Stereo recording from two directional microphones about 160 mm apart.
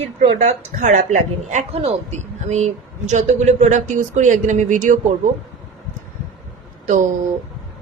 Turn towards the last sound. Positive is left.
turn(degrees=-50)  # may be behind; listen again after turning